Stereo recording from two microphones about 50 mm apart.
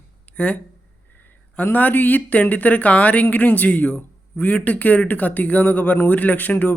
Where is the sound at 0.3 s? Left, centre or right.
Left.